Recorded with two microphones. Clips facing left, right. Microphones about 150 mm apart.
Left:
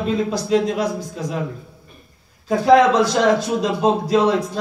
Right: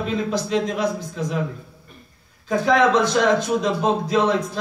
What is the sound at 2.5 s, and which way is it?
A man's voice, 35° left (ahead or behind).